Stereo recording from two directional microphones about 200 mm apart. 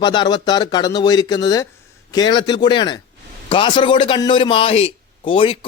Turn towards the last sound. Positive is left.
turn(degrees=25)  # may be behind; listen again after turning